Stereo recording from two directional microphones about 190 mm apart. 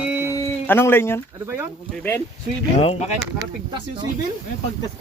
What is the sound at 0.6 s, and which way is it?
Speech, 10° left (ahead or behind).